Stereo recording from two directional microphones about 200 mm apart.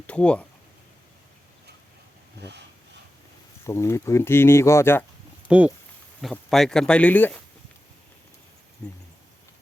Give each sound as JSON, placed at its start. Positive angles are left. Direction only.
{"t": 0.1, "sound": "speech", "side_deg": 5}
{"t": 2.4, "sound": "a sound", "side_deg": -55}
{"t": 3.7, "sound": "speech", "side_deg": 15}
{"t": 5.5, "sound": "speech", "side_deg": -5}
{"t": 8.8, "sound": "speech", "side_deg": 10}